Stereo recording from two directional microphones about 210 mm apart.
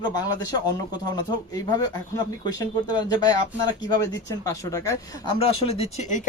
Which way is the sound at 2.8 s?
20° left (ahead or behind).